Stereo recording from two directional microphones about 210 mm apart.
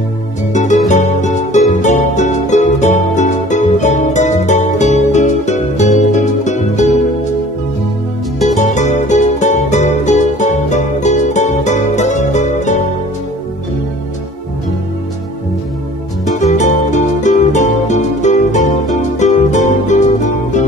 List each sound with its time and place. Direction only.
0.5 s music: 35° left (ahead or behind)
8.4 s music: 35° left (ahead or behind)
16.3 s music: 35° left (ahead or behind)